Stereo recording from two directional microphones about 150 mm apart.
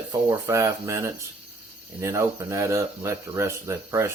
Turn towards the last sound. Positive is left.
turn(degrees=-20)  # may be behind; listen again after turning